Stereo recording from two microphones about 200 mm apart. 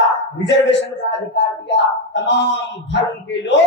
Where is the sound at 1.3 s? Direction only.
60° left (ahead or behind).